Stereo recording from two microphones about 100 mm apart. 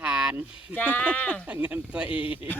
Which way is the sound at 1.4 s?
15° right (ahead or behind).